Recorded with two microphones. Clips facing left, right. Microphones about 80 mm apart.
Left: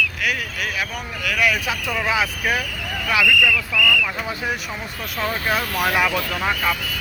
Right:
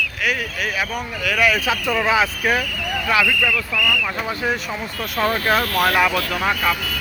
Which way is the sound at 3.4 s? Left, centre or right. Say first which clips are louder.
Left 1 dB; right.